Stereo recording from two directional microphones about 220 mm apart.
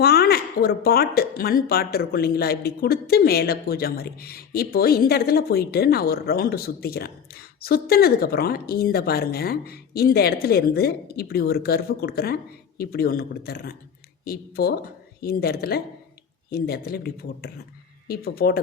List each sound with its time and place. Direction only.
0.0 s speech: 45° left (ahead or behind)